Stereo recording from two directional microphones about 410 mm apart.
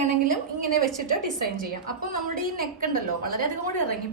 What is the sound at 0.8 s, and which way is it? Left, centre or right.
Speech, right.